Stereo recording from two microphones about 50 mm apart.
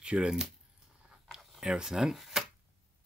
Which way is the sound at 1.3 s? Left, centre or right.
Centre.